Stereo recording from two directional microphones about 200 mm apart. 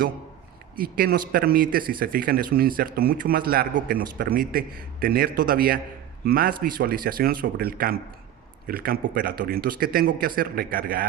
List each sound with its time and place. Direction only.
0.8 s speech: 45° right (ahead or behind)